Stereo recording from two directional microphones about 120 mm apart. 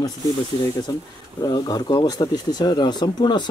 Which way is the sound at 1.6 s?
30° left (ahead or behind).